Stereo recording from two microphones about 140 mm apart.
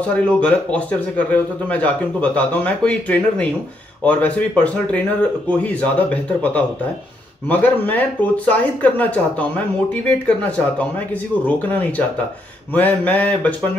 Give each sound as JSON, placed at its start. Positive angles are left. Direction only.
{"t": 0.0, "sound": "a man's voice", "side_deg": 10}